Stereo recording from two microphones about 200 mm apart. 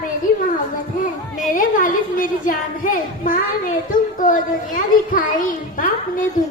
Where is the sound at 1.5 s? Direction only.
40° left (ahead or behind).